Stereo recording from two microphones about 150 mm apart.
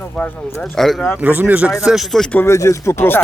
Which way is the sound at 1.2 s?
10° right (ahead or behind).